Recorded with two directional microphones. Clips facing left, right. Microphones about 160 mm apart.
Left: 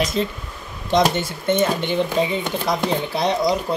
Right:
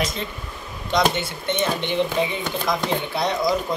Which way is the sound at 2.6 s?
35° left (ahead or behind).